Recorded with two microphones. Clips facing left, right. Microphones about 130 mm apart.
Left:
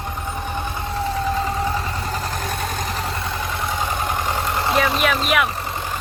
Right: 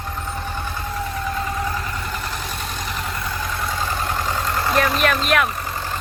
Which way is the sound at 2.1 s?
50° left (ahead or behind).